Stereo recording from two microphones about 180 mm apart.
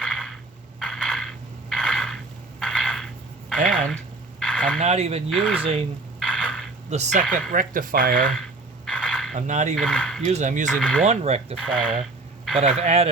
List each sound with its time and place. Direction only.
0.0 s a sound: 5° left (ahead or behind)
4.8 s speech: 35° right (ahead or behind)
5.3 s speech: 5° left (ahead or behind)
6.1 s a sound: 5° left (ahead or behind)
6.9 s speech: 40° right (ahead or behind)
7.3 s speech: 50° right (ahead or behind)
8.9 s a sound: 5° left (ahead or behind)
9.3 s speech: 40° right (ahead or behind)
9.7 s speech: 5° left (ahead or behind)
10.2 s speech: 40° right (ahead or behind)
10.8 s speech: 5° left (ahead or behind)
11.0 s speech: 35° right (ahead or behind)
11.5 s speech: 5° left (ahead or behind)
12.5 s speech: 40° right (ahead or behind)